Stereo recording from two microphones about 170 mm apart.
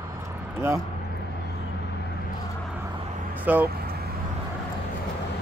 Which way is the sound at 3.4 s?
10° right (ahead or behind).